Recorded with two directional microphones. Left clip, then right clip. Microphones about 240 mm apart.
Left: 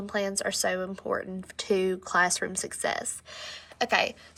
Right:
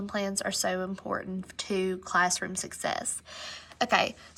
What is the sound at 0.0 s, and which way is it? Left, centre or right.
Speech, centre.